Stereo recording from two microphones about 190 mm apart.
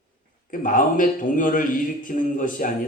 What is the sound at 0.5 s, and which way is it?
Speech, 45° left (ahead or behind).